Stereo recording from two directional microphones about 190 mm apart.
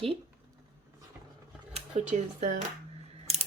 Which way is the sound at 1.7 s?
35° right (ahead or behind).